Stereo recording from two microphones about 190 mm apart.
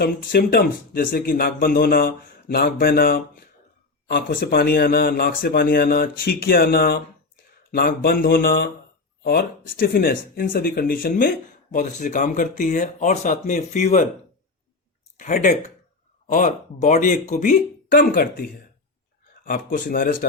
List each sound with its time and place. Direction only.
0.0 s speech: 55° left (ahead or behind)
15.2 s speech: 40° left (ahead or behind)
19.5 s speech: 50° left (ahead or behind)